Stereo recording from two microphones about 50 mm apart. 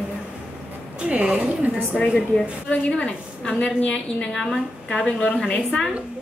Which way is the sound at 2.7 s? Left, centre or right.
Centre.